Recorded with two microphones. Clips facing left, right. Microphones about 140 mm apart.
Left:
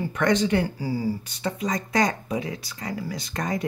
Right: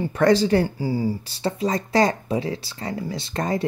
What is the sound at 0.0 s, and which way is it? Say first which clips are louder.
Speech: right 4 dB; 35° right (ahead or behind).